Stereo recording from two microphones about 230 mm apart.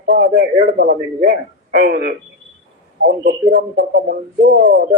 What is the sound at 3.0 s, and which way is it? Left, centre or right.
Speech, right.